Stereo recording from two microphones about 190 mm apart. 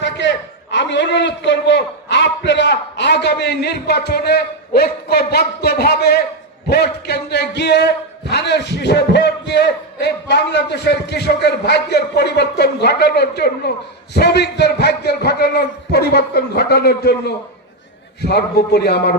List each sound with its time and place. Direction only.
0.0 s a man's voice: 70° left (ahead or behind)